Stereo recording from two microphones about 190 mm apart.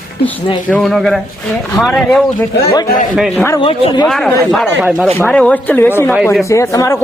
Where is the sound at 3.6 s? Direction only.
25° left (ahead or behind).